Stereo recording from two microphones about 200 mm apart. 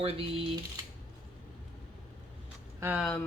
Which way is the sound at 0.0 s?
30° right (ahead or behind).